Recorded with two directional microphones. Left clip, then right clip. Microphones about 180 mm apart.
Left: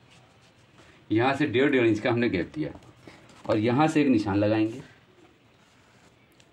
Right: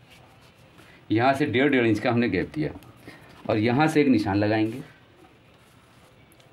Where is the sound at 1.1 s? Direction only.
55° right (ahead or behind).